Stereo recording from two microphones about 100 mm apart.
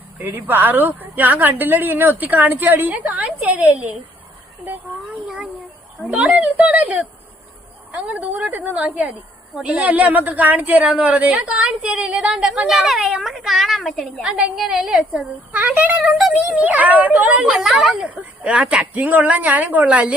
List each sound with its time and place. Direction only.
0.2 s a woman's voice: 20° right (ahead or behind)
6.1 s a woman's voice: 10° right (ahead or behind)
17.4 s a woman's voice: 5° right (ahead or behind)